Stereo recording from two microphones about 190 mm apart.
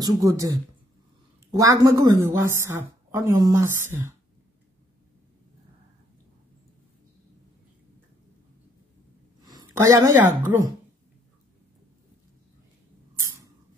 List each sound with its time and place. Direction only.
0.0 s a woman's voice: 20° right (ahead or behind)
9.4 s speech: 20° right (ahead or behind)